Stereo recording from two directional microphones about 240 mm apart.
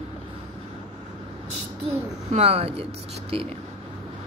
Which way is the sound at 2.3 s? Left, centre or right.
Right.